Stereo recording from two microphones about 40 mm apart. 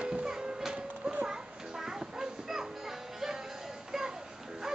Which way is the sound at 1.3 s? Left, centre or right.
Centre.